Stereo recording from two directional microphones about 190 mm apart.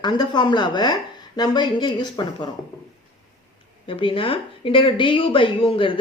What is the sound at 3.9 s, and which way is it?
Speech, 25° left (ahead or behind).